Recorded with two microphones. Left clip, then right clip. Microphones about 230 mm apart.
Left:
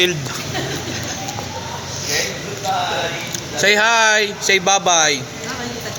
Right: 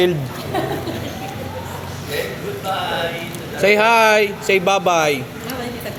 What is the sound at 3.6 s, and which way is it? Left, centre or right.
Speech, centre.